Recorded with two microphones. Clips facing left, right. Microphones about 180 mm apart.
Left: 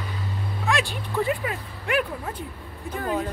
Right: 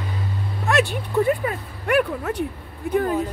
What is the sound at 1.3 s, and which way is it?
Speech, 45° right (ahead or behind).